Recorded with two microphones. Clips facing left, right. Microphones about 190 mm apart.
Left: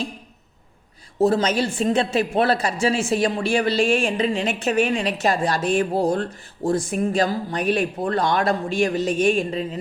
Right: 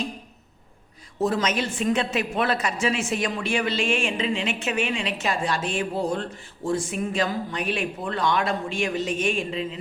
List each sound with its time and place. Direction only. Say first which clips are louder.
1.2 s speech: left 5 dB; 30° left (ahead or behind)